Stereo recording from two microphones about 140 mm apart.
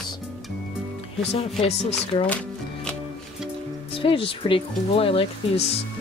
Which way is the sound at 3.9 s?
40° left (ahead or behind).